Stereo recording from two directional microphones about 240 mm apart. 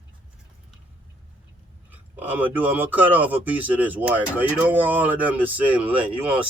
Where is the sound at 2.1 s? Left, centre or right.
Centre.